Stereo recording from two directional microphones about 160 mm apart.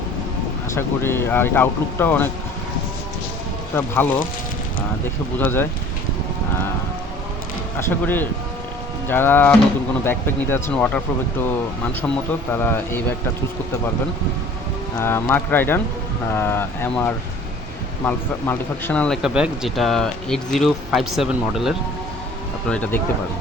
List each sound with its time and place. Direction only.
0.8 s speech: 15° left (ahead or behind)
3.8 s speech: 15° left (ahead or behind)
5.4 s speech: 15° left (ahead or behind)
7.8 s speech: 15° left (ahead or behind)
12.0 s speech: 15° left (ahead or behind)
14.9 s speech: 15° left (ahead or behind); by 21.8 s centre (ahead or behind)
22.7 s speech: 10° left (ahead or behind)